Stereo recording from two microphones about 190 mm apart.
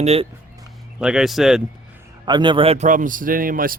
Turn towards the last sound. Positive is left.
turn(degrees=-50)  # may be behind; listen again after turning